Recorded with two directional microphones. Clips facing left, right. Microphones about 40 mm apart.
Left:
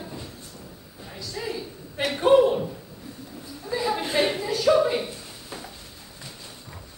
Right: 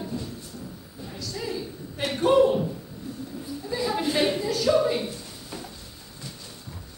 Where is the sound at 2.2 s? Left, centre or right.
Centre.